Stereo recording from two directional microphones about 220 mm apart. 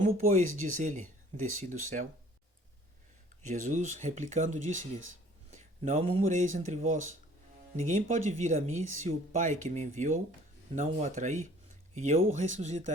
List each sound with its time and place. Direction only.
0.0 s speech: 35° right (ahead or behind)
3.5 s speech: 35° right (ahead or behind)